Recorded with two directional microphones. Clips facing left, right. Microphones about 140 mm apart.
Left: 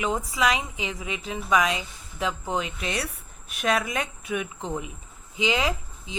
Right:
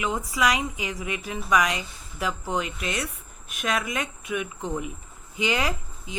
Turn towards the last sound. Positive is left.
turn(degrees=20)  # may be behind; listen again after turning